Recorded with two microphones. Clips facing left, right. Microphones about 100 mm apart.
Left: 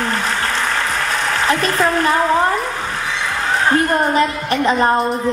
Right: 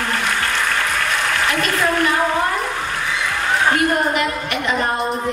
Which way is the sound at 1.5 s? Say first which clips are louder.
Left 5 dB; 35° left (ahead or behind).